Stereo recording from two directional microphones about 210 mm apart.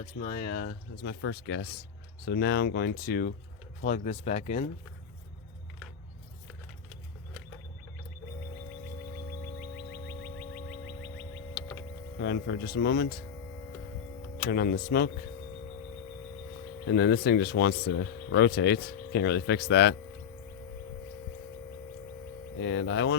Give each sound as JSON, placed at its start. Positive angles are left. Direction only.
{"t": 0.2, "sound": "speech", "side_deg": 45}
{"t": 9.6, "sound": "music", "side_deg": 45}
{"t": 12.2, "sound": "speech", "side_deg": 50}
{"t": 14.5, "sound": "speech", "side_deg": 45}
{"t": 16.9, "sound": "speech", "side_deg": 50}
{"t": 22.5, "sound": "speech", "side_deg": 60}